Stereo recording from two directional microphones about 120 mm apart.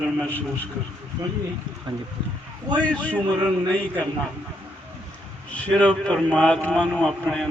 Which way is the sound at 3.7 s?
15° left (ahead or behind).